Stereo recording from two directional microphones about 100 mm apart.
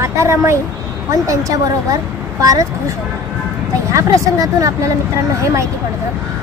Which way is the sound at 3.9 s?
35° right (ahead or behind).